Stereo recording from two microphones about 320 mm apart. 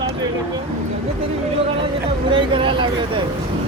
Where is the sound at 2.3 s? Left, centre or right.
Centre.